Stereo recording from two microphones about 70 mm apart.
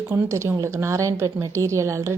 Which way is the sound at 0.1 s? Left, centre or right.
Right.